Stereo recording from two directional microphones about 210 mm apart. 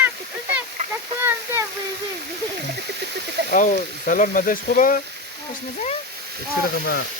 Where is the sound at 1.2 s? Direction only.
10° right (ahead or behind).